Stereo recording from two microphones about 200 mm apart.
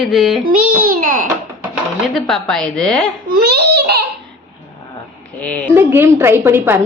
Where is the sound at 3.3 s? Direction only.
50° right (ahead or behind).